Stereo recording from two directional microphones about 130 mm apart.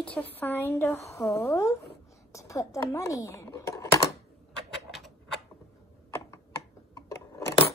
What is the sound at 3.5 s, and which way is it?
Typing, 25° left (ahead or behind).